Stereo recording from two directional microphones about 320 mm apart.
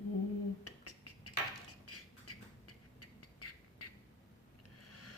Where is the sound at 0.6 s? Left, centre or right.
Left.